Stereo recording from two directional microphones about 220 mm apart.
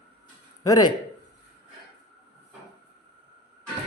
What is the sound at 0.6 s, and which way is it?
Speech, 15° left (ahead or behind).